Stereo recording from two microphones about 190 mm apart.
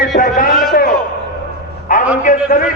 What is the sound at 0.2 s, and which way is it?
Speech, 45° left (ahead or behind).